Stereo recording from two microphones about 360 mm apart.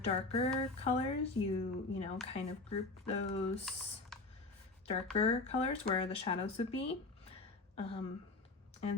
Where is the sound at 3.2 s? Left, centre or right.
Centre.